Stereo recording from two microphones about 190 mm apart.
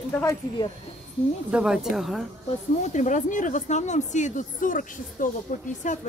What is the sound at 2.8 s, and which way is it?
Speech, 40° left (ahead or behind).